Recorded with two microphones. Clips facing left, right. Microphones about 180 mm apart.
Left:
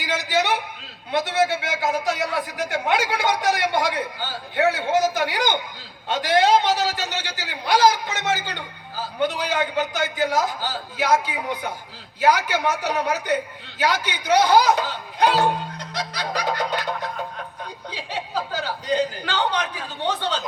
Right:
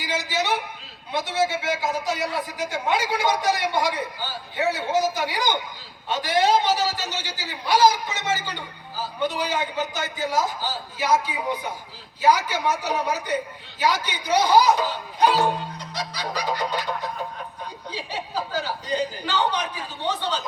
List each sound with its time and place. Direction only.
0.1 s a sound: 65° left (ahead or behind)
1.1 s a man's voice: 70° left (ahead or behind)
9.4 s a man's voice: 70° left (ahead or behind)
17.9 s a man's voice: 65° left (ahead or behind)